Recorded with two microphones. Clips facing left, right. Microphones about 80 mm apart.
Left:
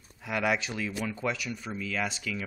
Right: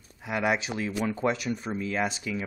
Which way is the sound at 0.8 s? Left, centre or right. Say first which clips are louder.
Right 4 dB; right.